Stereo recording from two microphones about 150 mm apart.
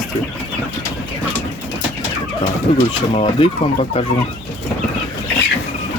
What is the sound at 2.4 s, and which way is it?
Speech, 40° left (ahead or behind).